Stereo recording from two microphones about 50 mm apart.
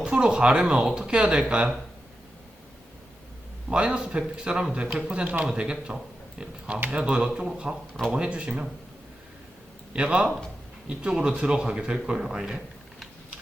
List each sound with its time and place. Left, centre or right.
0.0 s speech: centre
3.7 s speech: centre
6.9 s speech: centre
9.9 s speech: right